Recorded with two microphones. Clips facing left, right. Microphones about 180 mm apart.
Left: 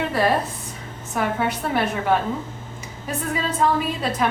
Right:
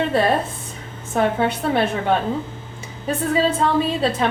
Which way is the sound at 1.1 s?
30° right (ahead or behind).